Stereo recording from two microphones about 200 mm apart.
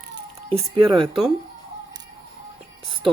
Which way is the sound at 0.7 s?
25° right (ahead or behind).